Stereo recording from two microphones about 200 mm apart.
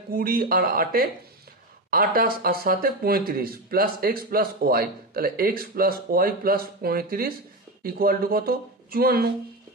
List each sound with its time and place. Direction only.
0.1 s speech: 45° right (ahead or behind)